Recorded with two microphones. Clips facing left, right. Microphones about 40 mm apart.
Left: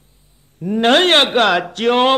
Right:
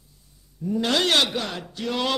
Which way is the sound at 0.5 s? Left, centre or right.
Left.